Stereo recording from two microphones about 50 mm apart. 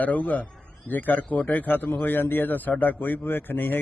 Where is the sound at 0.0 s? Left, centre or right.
Left.